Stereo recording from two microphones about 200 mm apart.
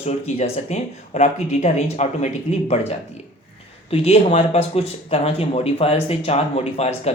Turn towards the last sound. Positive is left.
turn(degrees=30)  # may be behind; listen again after turning